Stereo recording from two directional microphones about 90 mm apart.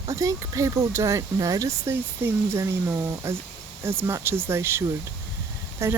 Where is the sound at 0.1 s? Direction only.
40° right (ahead or behind).